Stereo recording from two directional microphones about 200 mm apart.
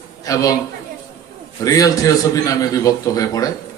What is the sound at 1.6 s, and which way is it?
A man's voice, 15° left (ahead or behind).